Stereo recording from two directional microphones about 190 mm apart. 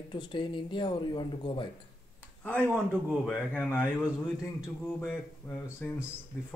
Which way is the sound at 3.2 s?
5° left (ahead or behind).